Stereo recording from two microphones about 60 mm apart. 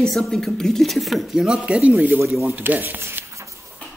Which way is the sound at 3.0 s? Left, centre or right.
Right.